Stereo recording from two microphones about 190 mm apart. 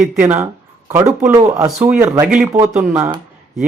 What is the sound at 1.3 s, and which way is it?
Speech, 20° right (ahead or behind).